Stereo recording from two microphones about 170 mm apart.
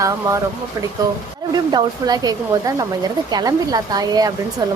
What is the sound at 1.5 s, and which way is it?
A woman's voice, 25° right (ahead or behind).